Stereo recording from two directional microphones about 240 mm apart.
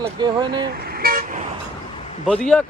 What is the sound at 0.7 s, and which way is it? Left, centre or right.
Vehicle, right.